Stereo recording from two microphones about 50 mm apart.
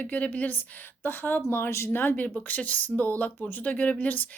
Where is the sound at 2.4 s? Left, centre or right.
Left.